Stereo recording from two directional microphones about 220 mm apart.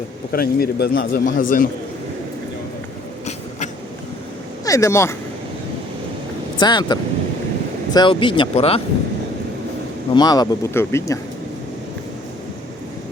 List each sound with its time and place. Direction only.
0.3 s a man's voice: 45° left (ahead or behind)
4.6 s speech: 15° left (ahead or behind)
6.6 s speech: 20° left (ahead or behind)
10.2 s speech: 15° left (ahead or behind)